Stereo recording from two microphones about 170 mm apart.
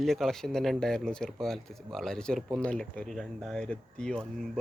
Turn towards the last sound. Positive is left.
turn(degrees=5)  # may be behind; listen again after turning